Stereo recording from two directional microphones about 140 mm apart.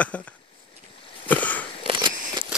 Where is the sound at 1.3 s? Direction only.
10° left (ahead or behind).